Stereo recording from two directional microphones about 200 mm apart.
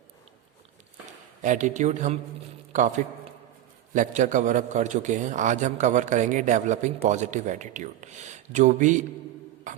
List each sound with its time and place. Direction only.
1.4 s a man's voice: 40° right (ahead or behind)
9.7 s music: 40° right (ahead or behind)